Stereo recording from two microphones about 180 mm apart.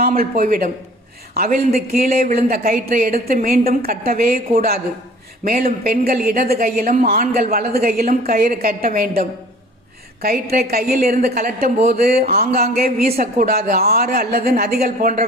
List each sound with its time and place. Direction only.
0.2 s a woman's voice: 50° right (ahead or behind)